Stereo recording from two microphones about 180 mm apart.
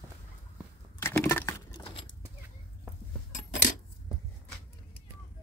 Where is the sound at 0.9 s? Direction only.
15° left (ahead or behind).